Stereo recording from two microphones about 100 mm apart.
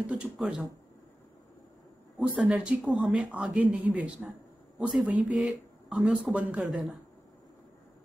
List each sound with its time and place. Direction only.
0.0 s speech: 10° right (ahead or behind)
2.1 s a man's voice: 5° right (ahead or behind)